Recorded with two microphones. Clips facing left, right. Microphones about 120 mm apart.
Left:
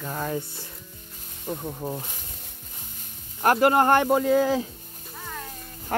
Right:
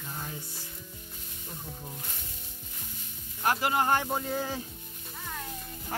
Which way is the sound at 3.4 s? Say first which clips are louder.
Left 8 dB; 55° left (ahead or behind).